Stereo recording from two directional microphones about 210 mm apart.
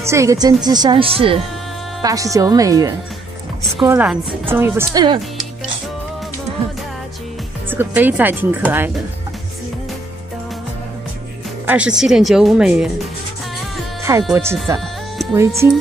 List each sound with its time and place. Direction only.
0.0 s speech: 15° right (ahead or behind)
7.7 s speech: 10° right (ahead or behind)
11.6 s speech: 5° right (ahead or behind)
14.3 s speech: 15° right (ahead or behind)